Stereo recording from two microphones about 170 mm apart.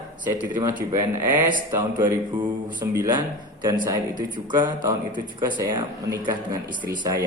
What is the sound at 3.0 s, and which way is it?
A man's voice, 25° right (ahead or behind).